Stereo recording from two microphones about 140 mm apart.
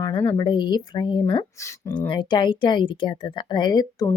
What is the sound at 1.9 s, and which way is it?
Speech, 35° left (ahead or behind).